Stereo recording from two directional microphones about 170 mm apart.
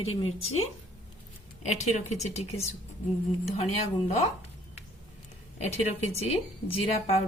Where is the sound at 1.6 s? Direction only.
45° left (ahead or behind).